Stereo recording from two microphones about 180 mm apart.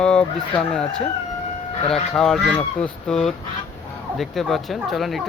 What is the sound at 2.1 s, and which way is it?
Speech, 5° left (ahead or behind).